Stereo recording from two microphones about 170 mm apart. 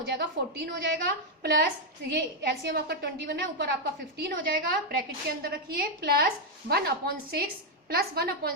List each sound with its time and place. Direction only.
0.0 s a woman's voice: 70° right (ahead or behind)
5.4 s a woman's voice: 65° right (ahead or behind)